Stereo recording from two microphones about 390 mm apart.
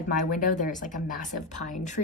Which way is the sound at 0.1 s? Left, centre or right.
Left.